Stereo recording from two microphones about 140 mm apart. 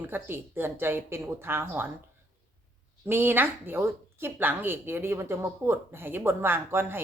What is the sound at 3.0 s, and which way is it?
Speech, 15° right (ahead or behind).